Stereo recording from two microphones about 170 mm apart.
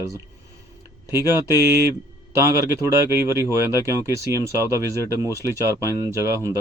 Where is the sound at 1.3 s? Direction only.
15° right (ahead or behind).